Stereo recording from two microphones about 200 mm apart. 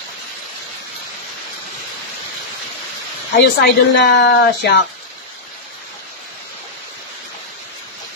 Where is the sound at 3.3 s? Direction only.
60° left (ahead or behind).